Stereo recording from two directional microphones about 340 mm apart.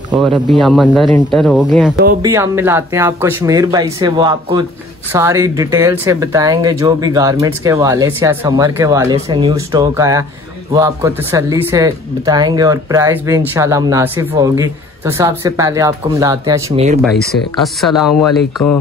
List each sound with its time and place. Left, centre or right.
0.5 s speech: centre